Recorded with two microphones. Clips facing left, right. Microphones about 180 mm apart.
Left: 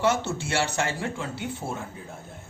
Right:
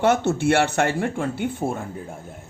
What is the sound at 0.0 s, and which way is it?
A man's voice, 55° right (ahead or behind).